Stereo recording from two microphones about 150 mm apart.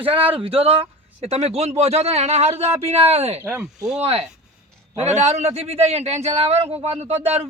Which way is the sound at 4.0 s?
45° right (ahead or behind).